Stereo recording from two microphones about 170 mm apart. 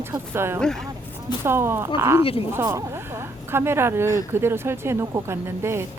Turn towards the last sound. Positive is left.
turn(degrees=-15)  # may be behind; listen again after turning